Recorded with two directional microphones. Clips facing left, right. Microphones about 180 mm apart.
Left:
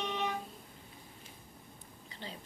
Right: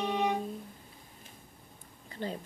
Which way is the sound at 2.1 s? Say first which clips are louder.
Right 10 dB; 50° right (ahead or behind).